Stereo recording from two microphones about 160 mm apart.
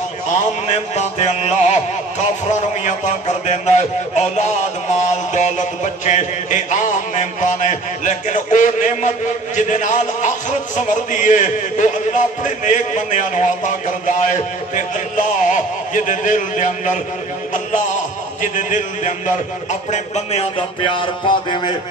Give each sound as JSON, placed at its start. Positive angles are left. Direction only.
{"t": 0.7, "sound": "a man's voice", "side_deg": 45}
{"t": 5.0, "sound": "mantra", "side_deg": 50}
{"t": 10.9, "sound": "a man's voice", "side_deg": 50}
{"t": 18.4, "sound": "a man's voice", "side_deg": 50}